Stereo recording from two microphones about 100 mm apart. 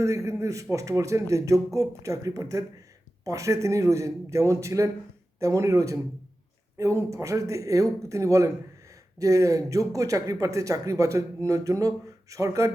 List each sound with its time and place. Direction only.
0.0 s speech: 30° right (ahead or behind)